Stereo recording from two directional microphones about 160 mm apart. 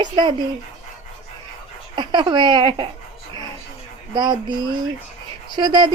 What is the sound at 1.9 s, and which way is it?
Speech, 30° right (ahead or behind).